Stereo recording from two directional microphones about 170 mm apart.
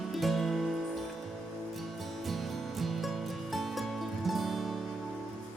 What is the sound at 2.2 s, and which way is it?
Music, centre (ahead or behind).